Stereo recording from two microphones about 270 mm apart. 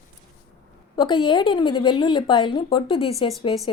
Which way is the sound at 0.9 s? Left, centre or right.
Centre.